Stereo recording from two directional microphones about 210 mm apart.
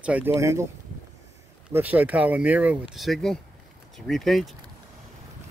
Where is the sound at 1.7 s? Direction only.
10° right (ahead or behind).